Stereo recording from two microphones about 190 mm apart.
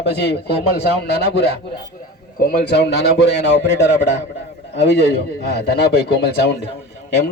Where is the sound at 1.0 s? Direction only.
60° left (ahead or behind).